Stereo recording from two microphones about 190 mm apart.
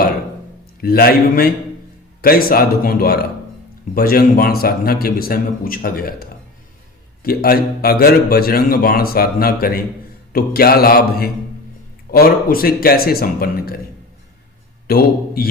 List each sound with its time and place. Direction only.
0.8 s a man's voice: 50° left (ahead or behind)
14.8 s a man's voice: 55° left (ahead or behind)